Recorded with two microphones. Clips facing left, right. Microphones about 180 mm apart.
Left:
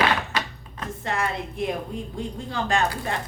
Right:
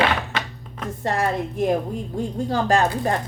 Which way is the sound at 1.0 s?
40° right (ahead or behind).